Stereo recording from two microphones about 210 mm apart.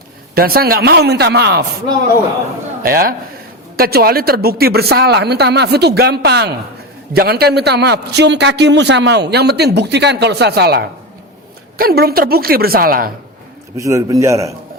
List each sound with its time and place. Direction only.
0.3 s a man's voice: 45° right (ahead or behind)
2.8 s a man's voice: 45° right (ahead or behind)
13.7 s a man's voice: 15° right (ahead or behind)